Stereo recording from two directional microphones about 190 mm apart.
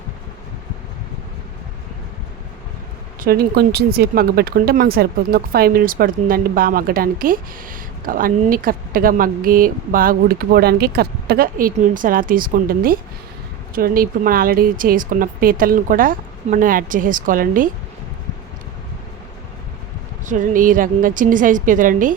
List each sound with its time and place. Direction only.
3.2 s speech: 55° right (ahead or behind)
20.2 s speech: 45° right (ahead or behind)